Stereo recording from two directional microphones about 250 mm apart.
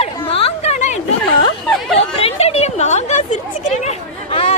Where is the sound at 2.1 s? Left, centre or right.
Left.